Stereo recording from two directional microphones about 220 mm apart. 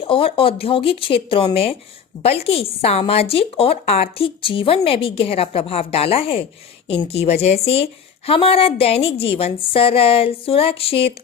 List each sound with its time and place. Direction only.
0.0 s a woman's voice: 25° left (ahead or behind)